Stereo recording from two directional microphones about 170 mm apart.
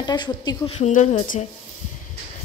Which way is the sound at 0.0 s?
25° left (ahead or behind).